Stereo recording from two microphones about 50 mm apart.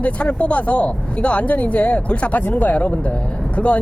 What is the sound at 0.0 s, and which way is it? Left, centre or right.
Speech, left.